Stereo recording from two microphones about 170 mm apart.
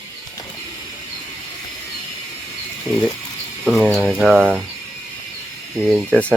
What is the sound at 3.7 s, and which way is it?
Speech, centre (ahead or behind).